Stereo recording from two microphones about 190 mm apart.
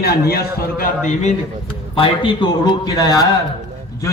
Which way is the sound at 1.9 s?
25° left (ahead or behind).